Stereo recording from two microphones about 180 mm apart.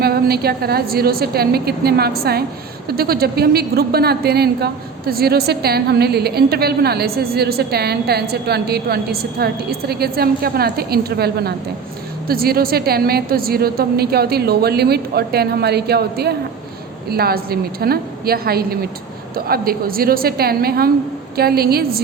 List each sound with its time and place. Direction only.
0.0 s a woman's voice: 60° right (ahead or behind)